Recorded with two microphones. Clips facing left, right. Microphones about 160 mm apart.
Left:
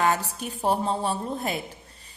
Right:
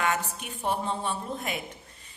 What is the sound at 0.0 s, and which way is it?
A woman's voice, 35° left (ahead or behind).